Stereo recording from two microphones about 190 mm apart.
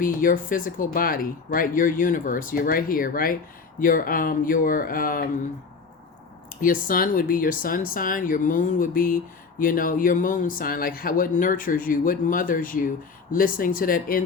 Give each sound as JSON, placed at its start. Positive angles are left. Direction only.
{"t": 0.0, "sound": "speech", "side_deg": 45}
{"t": 6.5, "sound": "speech", "side_deg": 45}